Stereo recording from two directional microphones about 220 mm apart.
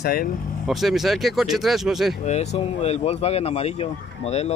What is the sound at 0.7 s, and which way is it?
Speech, centre (ahead or behind).